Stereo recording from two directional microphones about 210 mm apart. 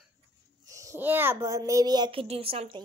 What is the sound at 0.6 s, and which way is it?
A child's voice, 15° right (ahead or behind).